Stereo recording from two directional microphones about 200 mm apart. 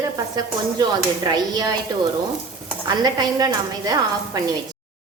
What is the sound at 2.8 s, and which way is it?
Speech, 20° right (ahead or behind).